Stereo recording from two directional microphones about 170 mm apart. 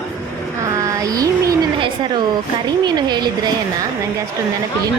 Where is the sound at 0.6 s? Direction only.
20° right (ahead or behind).